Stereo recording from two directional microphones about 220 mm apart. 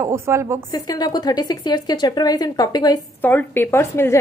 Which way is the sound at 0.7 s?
20° left (ahead or behind).